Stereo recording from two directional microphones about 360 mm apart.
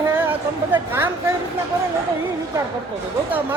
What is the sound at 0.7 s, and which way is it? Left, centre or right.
Speech, centre.